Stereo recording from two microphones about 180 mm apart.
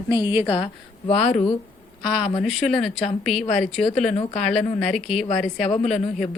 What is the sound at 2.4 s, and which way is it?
Speech, centre (ahead or behind).